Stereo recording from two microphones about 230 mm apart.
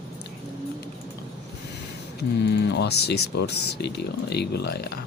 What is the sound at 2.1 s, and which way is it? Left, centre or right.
Speech, left.